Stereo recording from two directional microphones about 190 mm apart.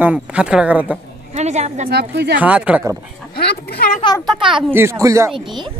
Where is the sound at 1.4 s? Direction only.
35° right (ahead or behind).